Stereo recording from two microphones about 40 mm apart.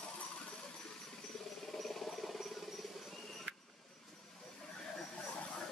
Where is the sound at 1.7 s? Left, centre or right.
Centre.